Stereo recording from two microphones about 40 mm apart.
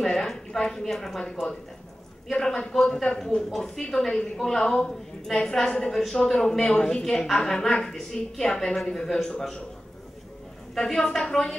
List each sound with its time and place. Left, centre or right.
0.0 s a woman's voice: centre
2.3 s a woman's voice: centre
3.8 s a woman's voice: centre
10.7 s a woman's voice: centre